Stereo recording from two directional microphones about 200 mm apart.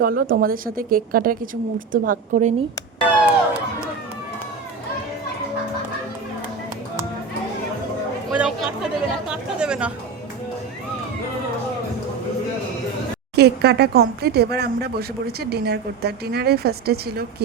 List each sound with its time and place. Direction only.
0.0 s speech: 45° right (ahead or behind)
3.2 s a sound: 5° right (ahead or behind)
8.4 s speech: centre (ahead or behind)
13.3 s speech: 55° right (ahead or behind)